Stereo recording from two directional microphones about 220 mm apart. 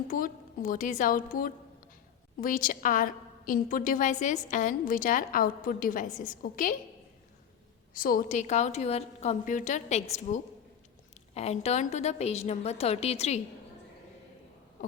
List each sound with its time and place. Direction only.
0.1 s a woman's voice: 40° left (ahead or behind)
7.9 s a woman's voice: 40° left (ahead or behind)